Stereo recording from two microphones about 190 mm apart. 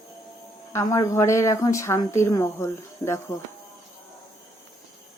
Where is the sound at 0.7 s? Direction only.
15° left (ahead or behind).